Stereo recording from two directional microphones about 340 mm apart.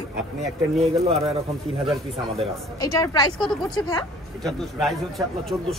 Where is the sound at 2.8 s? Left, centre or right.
Centre.